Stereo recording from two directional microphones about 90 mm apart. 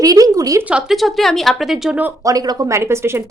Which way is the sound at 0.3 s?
40° right (ahead or behind).